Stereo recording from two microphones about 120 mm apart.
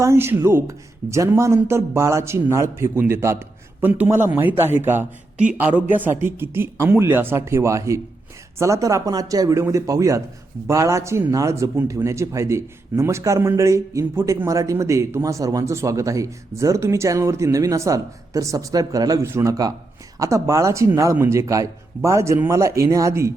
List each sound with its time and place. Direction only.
0.0 s a man's voice: 20° right (ahead or behind)